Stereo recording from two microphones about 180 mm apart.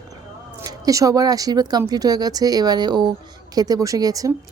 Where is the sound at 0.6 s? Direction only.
20° right (ahead or behind).